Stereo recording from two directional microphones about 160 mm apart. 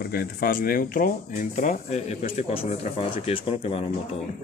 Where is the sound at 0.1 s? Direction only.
70° left (ahead or behind).